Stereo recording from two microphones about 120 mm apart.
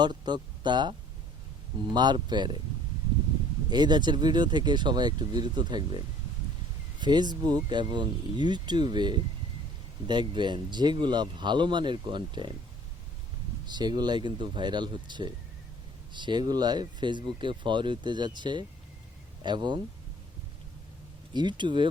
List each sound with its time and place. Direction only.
0.0 s speech: 40° right (ahead or behind)
3.7 s speech: 35° right (ahead or behind)
7.0 s speech: 35° right (ahead or behind)
13.7 s speech: 35° right (ahead or behind)
21.3 s speech: 40° right (ahead or behind)